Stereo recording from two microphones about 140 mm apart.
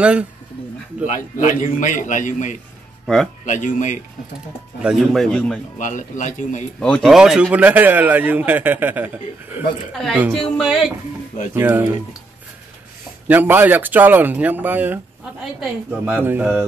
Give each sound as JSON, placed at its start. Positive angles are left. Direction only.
{"t": 0.0, "sound": "a man's voice", "side_deg": -10}
{"t": 1.0, "sound": "a man's voice", "side_deg": 65}
{"t": 4.8, "sound": "speech", "side_deg": 0}
{"t": 5.8, "sound": "a man's voice", "side_deg": 65}
{"t": 6.8, "sound": "a man's voice", "side_deg": 5}
{"t": 10.3, "sound": "speech", "side_deg": 0}
{"t": 11.5, "sound": "a man's voice", "side_deg": -15}
{"t": 13.3, "sound": "a man's voice", "side_deg": -15}